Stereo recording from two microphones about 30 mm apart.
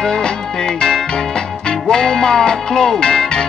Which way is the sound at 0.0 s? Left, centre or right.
Left.